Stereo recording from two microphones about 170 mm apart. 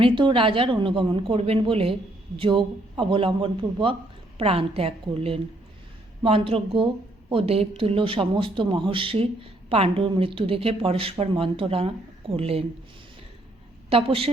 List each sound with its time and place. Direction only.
0.0 s speech: 30° right (ahead or behind)
13.9 s speech: 35° right (ahead or behind)